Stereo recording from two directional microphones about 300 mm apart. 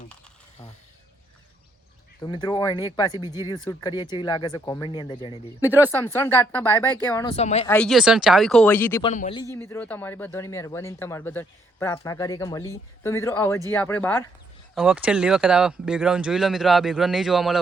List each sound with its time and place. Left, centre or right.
2.2 s speech: centre
5.6 s speech: centre
5.9 s speech: centre
7.7 s speech: centre
9.1 s a man's voice: left
9.4 s speech: centre
14.8 s speech: centre